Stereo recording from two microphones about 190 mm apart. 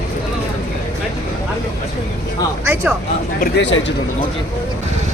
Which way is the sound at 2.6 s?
10° right (ahead or behind).